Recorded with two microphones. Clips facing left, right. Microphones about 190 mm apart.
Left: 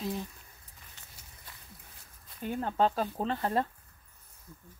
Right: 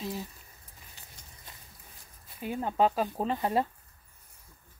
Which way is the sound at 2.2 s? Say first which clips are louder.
Right 1 dB; 5° right (ahead or behind).